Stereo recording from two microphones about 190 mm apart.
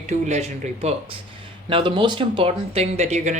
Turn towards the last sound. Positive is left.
turn(degrees=-35)  # may be behind; listen again after turning